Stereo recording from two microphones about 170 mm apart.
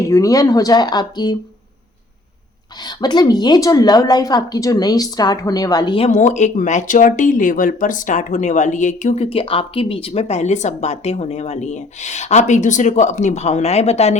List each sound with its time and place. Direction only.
0.1 s speech: 20° left (ahead or behind)
2.8 s speech: 25° left (ahead or behind)
6.1 s speech: 45° left (ahead or behind)